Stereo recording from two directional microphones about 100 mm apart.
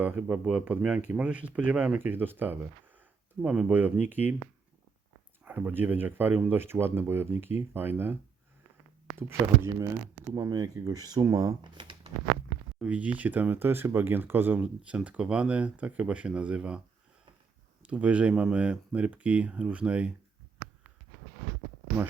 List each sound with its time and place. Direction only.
0.0 s speech: 15° right (ahead or behind)
5.5 s speech: 20° right (ahead or behind); by 11.5 s 35° right (ahead or behind)
11.6 s speech: 50° right (ahead or behind)
12.8 s speech: 15° right (ahead or behind)
17.8 s speech: 15° right (ahead or behind)